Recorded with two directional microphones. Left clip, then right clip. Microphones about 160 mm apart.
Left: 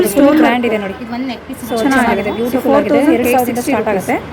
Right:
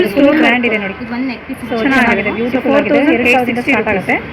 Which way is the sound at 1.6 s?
15° left (ahead or behind).